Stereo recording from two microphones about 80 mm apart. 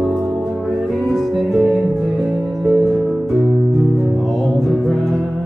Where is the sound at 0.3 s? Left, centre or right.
Centre.